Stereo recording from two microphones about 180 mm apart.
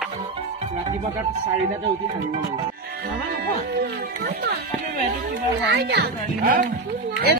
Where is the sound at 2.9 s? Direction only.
60° right (ahead or behind).